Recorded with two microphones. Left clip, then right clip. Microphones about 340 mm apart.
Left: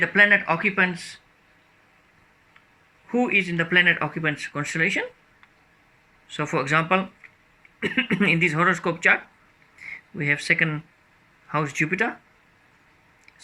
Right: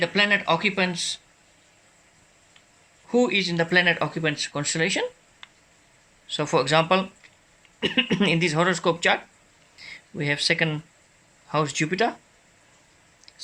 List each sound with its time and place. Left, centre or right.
0.0 s speech: centre
3.1 s speech: centre
6.3 s speech: centre